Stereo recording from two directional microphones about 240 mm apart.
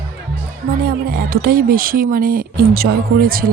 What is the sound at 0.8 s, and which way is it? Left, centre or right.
Speech, right.